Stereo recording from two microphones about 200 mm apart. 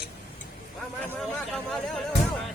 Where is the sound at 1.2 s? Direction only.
Centre (ahead or behind).